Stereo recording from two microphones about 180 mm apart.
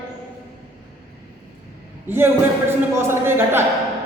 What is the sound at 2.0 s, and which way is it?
A man's voice, 15° right (ahead or behind).